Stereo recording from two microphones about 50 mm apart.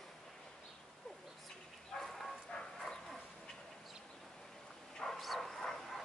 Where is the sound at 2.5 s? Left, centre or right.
Centre.